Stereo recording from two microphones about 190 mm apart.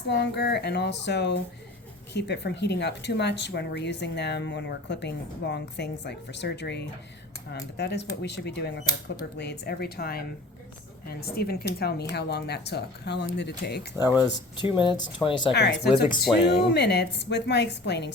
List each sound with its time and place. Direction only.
0.1 s speech: 60° left (ahead or behind)
14.2 s speech: 25° left (ahead or behind)
15.5 s speech: 60° left (ahead or behind)